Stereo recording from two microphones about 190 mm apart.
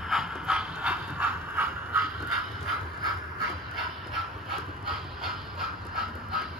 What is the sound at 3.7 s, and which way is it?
Dog, centre (ahead or behind).